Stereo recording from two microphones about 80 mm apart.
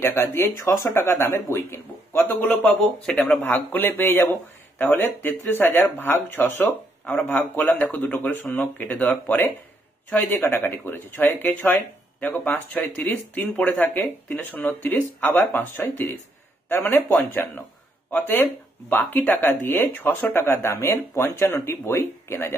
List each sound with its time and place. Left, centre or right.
0.0 s speech: left
2.6 s speech: centre
3.4 s speech: left